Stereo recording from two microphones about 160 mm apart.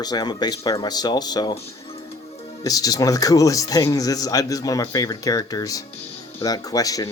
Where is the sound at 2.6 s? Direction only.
20° left (ahead or behind).